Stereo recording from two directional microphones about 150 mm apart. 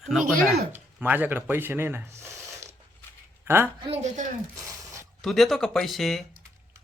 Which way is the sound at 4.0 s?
50° right (ahead or behind).